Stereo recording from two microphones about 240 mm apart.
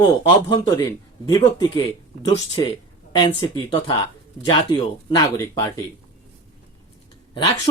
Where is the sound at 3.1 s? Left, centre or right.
Centre.